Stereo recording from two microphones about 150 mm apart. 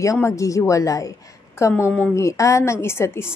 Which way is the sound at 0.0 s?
20° left (ahead or behind).